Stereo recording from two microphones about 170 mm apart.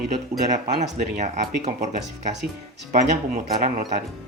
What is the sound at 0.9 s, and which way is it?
Speech, 45° right (ahead or behind).